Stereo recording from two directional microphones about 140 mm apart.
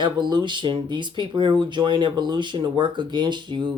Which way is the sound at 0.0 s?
35° right (ahead or behind).